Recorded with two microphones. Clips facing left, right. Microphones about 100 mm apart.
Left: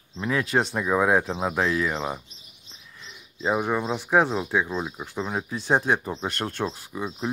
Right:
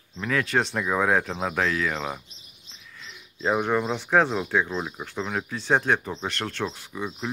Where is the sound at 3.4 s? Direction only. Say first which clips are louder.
Right 1 dB; 10° left (ahead or behind).